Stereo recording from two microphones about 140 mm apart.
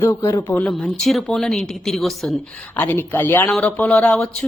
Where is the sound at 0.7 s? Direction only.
Centre (ahead or behind).